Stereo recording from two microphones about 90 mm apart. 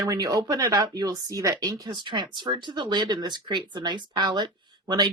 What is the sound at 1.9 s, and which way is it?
Speech, 60° right (ahead or behind).